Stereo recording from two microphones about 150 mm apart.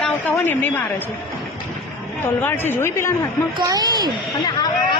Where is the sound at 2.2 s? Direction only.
15° left (ahead or behind).